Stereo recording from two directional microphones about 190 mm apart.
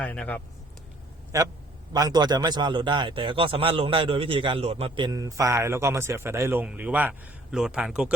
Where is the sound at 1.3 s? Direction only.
15° right (ahead or behind).